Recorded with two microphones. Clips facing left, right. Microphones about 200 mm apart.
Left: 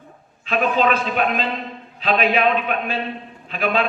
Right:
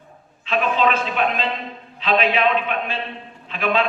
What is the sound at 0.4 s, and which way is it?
A man's voice, 40° left (ahead or behind).